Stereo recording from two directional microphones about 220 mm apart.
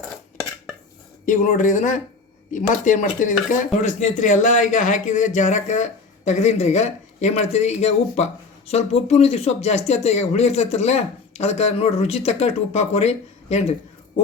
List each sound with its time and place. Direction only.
1.2 s speech: 35° left (ahead or behind)